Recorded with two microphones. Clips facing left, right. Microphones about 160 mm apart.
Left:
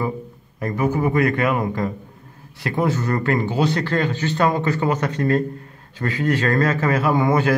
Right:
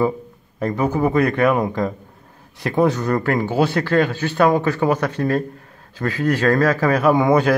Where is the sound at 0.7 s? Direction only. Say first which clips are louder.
Right 1 dB; 20° right (ahead or behind).